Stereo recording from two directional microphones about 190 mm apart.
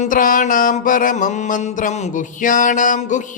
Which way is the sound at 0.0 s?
45° left (ahead or behind).